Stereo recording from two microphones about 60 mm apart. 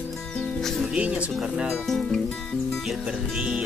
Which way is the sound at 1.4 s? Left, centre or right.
Centre.